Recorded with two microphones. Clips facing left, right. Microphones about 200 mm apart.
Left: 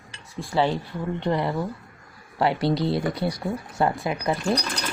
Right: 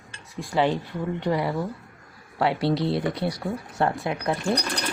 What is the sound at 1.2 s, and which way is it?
Speech, 10° right (ahead or behind).